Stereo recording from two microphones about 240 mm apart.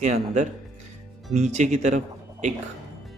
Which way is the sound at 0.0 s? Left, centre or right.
Right.